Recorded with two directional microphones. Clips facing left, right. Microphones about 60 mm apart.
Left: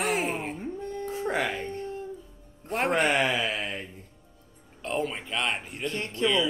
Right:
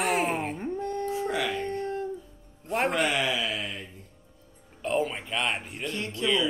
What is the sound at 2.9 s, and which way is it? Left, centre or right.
Speech, left.